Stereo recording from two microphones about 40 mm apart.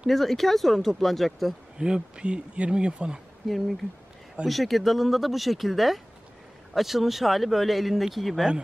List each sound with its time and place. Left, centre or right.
0.1 s speech: centre
1.8 s speech: centre
3.4 s speech: centre